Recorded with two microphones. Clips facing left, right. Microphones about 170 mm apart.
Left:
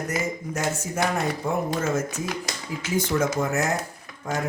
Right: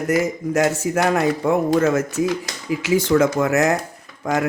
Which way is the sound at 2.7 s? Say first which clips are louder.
Right 9 dB; 85° right.